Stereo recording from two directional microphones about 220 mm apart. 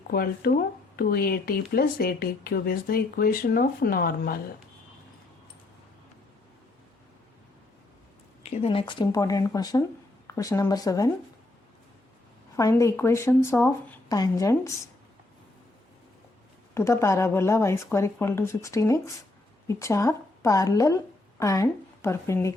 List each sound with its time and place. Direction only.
0.1 s speech: 40° left (ahead or behind)
8.4 s speech: 30° left (ahead or behind)
12.5 s speech: 15° left (ahead or behind)
16.7 s a woman's voice: 10° left (ahead or behind)